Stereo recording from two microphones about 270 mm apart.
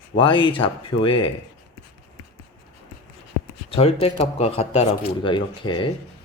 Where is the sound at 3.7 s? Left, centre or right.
Left.